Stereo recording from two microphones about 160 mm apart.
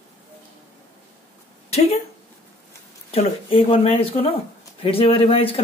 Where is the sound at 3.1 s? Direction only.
35° left (ahead or behind).